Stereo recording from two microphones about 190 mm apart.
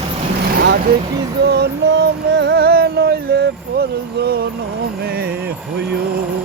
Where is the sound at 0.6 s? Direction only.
60° right (ahead or behind).